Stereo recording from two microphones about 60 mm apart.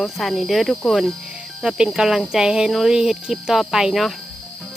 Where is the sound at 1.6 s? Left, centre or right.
Centre.